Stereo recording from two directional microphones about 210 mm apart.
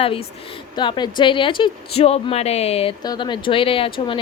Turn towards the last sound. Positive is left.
turn(degrees=25)  # may be behind; listen again after turning